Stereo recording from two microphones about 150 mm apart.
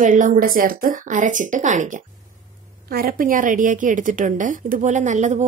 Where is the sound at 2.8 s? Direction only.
75° right (ahead or behind); by 5.4 s 55° right (ahead or behind).